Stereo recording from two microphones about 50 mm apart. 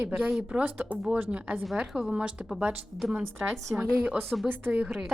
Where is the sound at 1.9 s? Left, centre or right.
Centre.